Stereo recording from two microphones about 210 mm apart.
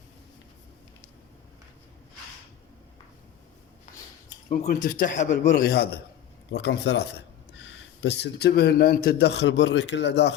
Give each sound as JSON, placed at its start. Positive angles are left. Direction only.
{"t": 4.4, "sound": "a man's voice", "side_deg": 35}
{"t": 5.5, "sound": "speech", "side_deg": 50}